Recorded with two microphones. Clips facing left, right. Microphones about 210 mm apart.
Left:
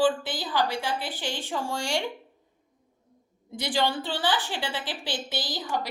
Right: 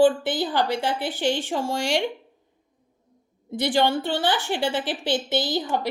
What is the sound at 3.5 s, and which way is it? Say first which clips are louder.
Speech: right 6 dB; 60° right (ahead or behind).